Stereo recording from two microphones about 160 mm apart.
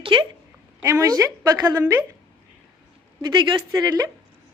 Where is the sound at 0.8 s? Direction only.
20° right (ahead or behind).